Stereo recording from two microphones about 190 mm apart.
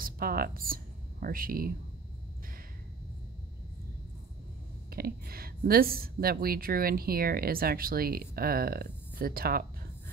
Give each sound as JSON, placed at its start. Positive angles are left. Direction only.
{"t": 0.0, "sound": "a woman's voice", "side_deg": -50}
{"t": 4.9, "sound": "a woman's voice", "side_deg": -55}